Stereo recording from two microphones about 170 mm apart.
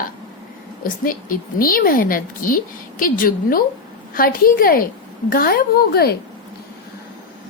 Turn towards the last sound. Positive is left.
turn(degrees=65)  # may be behind; listen again after turning